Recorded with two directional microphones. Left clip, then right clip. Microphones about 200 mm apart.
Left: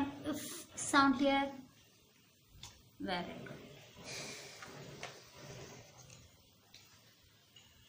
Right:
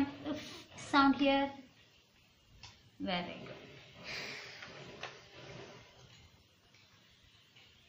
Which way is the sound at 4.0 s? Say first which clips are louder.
Right 4 dB; 15° left (ahead or behind).